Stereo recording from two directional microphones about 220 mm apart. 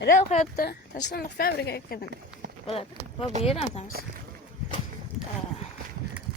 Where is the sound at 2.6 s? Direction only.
25° left (ahead or behind).